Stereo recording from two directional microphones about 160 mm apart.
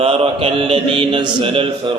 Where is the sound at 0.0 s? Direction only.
35° right (ahead or behind).